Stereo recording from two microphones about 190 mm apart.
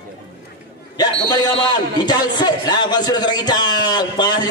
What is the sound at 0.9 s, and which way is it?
A man's voice, 20° left (ahead or behind).